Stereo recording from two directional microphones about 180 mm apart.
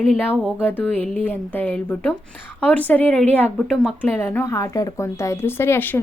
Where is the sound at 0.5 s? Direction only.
10° left (ahead or behind).